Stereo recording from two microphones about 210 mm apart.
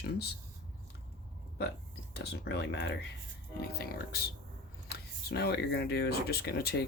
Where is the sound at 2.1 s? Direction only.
50° left (ahead or behind).